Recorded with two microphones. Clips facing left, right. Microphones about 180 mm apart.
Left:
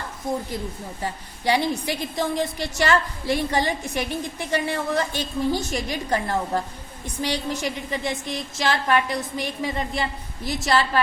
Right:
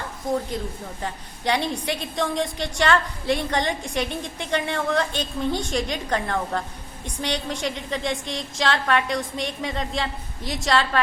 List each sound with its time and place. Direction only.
1.0 s a woman's voice: 10° left (ahead or behind)